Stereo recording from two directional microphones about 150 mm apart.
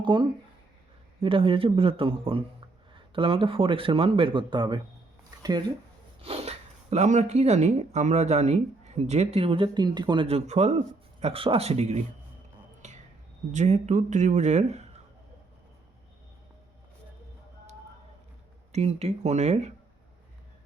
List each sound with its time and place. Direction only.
0.0 s speech: 30° right (ahead or behind)
5.4 s a sound: 30° right (ahead or behind)
6.2 s speech: 40° right (ahead or behind)
12.8 s a sound: 50° right (ahead or behind)
13.5 s speech: 50° right (ahead or behind)
18.7 s speech: 45° right (ahead or behind)